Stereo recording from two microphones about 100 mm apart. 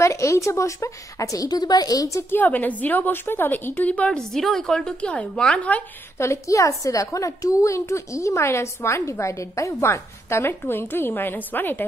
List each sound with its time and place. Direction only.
0.0 s a woman's voice: 30° left (ahead or behind)
2.3 s a woman's voice: 15° left (ahead or behind)
6.1 s a woman's voice: 30° left (ahead or behind)